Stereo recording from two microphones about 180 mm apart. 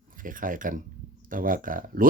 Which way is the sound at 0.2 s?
50° right (ahead or behind).